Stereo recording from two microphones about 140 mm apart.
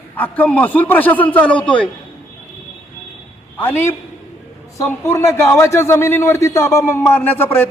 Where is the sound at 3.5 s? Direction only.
15° left (ahead or behind).